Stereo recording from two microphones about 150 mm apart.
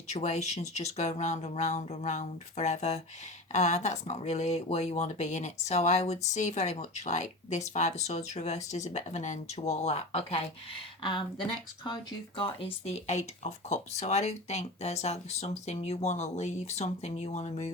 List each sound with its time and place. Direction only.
0.1 s speech: 50° left (ahead or behind)
12.4 s speech: 40° left (ahead or behind)